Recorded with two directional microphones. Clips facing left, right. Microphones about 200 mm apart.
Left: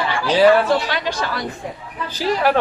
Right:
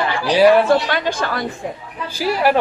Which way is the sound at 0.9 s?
50° right (ahead or behind).